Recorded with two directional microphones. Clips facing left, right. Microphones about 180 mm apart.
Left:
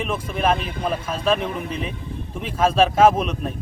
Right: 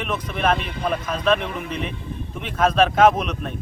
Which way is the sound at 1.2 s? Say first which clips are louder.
Right 1 dB; 5° left (ahead or behind).